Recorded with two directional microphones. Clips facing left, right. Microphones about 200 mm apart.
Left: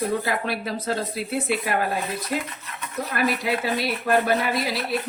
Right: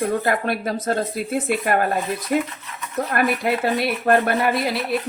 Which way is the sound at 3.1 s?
55° right (ahead or behind).